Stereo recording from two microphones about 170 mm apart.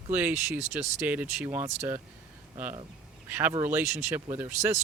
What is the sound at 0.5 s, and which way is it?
Speech, 40° right (ahead or behind).